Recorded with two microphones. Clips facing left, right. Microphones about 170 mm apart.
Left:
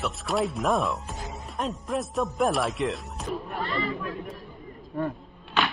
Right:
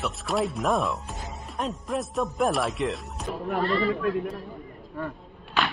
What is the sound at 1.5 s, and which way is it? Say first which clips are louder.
Speech: even; centre (ahead or behind).